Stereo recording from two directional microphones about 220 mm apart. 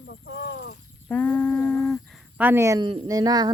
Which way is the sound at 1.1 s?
5° left (ahead or behind).